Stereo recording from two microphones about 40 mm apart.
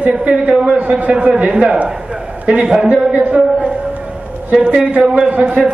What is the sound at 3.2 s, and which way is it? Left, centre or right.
Speech, right.